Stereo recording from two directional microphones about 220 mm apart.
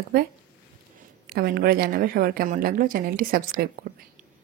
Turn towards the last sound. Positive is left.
turn(degrees=-45)  # may be behind; listen again after turning